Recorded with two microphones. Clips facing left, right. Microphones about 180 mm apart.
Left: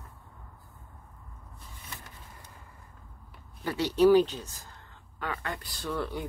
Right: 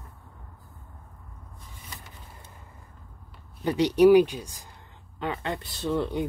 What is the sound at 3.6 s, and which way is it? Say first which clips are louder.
Speech: right 4 dB; 15° right (ahead or behind).